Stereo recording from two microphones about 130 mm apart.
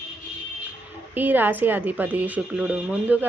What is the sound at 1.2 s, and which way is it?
Speech, 15° right (ahead or behind).